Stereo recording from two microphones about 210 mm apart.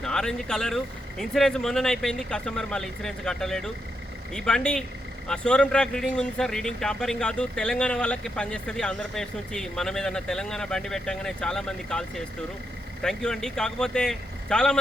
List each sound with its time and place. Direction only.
0.0 s speech: 5° left (ahead or behind)